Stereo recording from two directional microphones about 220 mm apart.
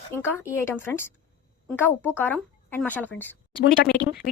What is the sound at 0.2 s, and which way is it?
Speech, 10° left (ahead or behind).